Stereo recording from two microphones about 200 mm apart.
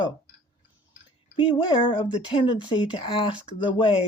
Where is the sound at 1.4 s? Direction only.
25° left (ahead or behind).